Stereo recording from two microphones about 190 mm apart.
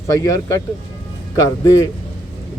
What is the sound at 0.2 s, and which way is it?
Speech, 15° left (ahead or behind).